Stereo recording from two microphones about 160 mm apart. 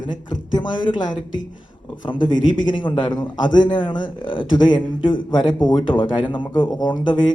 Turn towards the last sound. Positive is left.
turn(degrees=30)  # may be behind; listen again after turning